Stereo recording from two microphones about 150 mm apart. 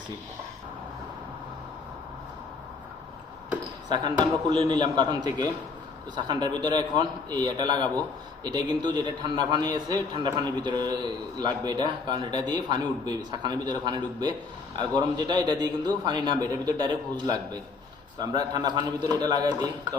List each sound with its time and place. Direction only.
3.8 s a man's voice: 30° right (ahead or behind)